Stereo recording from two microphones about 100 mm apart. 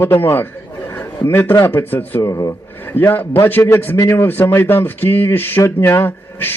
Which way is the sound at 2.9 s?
20° left (ahead or behind).